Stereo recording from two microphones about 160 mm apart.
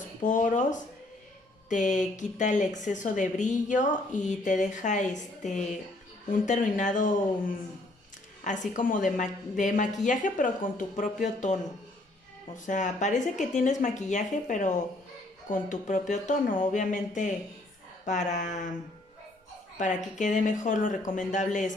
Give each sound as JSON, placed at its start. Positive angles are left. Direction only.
{"t": 0.2, "sound": "speech", "side_deg": 55}
{"t": 12.5, "sound": "speech", "side_deg": 50}
{"t": 19.8, "sound": "speech", "side_deg": 50}